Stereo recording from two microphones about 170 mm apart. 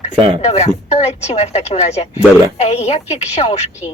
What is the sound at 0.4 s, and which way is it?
Speech, 40° left (ahead or behind).